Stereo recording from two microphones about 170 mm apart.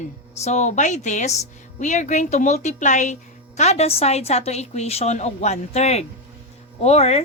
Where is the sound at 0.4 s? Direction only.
45° left (ahead or behind).